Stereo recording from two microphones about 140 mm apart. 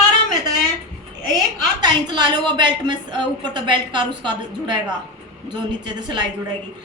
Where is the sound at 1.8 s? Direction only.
30° right (ahead or behind).